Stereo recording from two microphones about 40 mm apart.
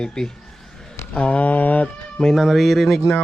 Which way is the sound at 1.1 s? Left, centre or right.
Left.